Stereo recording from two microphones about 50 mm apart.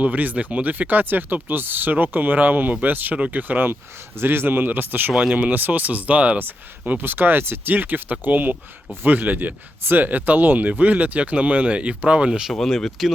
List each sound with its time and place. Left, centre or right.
0.0 s speech: right
6.4 s speech: right; by 12.5 s centre
12.5 s speech: centre